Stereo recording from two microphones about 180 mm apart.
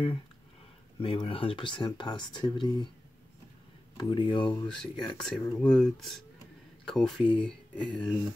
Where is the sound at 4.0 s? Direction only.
25° left (ahead or behind).